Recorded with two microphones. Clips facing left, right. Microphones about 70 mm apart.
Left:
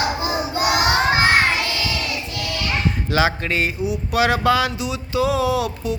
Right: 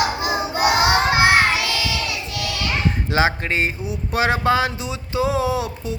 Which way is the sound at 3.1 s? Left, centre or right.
Right.